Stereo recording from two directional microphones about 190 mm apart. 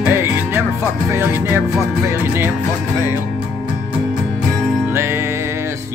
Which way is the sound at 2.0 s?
10° right (ahead or behind).